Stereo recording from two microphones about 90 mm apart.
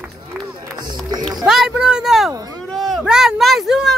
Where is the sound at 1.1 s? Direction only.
50° right (ahead or behind).